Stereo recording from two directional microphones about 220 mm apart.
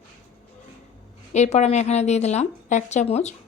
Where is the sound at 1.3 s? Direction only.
30° left (ahead or behind).